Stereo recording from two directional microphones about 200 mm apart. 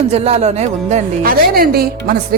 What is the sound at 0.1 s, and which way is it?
A woman's voice, 35° right (ahead or behind).